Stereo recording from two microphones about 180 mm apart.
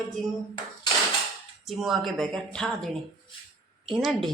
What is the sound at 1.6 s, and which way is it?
A woman's voice, centre (ahead or behind).